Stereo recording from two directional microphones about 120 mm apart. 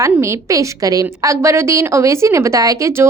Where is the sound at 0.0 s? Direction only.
25° right (ahead or behind).